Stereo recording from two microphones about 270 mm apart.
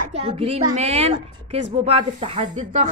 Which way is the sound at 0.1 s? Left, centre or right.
Right.